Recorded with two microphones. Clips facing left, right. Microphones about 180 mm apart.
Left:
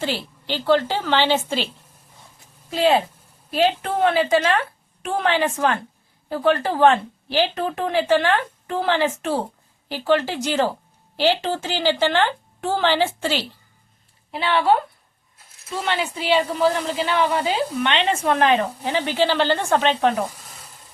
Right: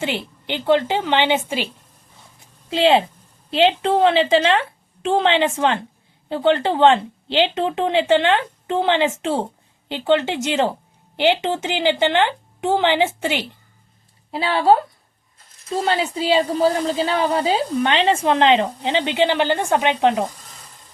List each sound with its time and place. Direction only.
0.0 s a woman's voice: 20° right (ahead or behind)
2.6 s a woman's voice: 25° right (ahead or behind)
14.3 s a woman's voice: 30° right (ahead or behind)